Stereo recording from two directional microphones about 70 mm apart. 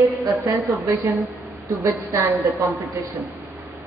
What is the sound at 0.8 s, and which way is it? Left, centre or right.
A woman's voice, right.